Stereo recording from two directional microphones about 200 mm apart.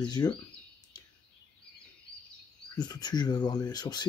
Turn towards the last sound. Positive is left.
turn(degrees=20)  # may be behind; listen again after turning